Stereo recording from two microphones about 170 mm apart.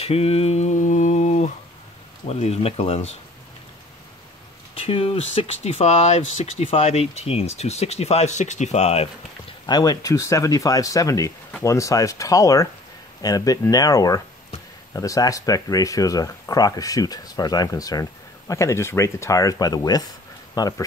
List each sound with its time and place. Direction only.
0.0 s mantra: 35° left (ahead or behind)
2.2 s speech: 40° left (ahead or behind)
4.7 s speech: 35° left (ahead or behind)
9.7 s speech: 25° left (ahead or behind)